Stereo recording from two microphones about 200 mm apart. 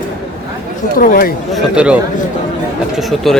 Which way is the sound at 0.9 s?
45° left (ahead or behind).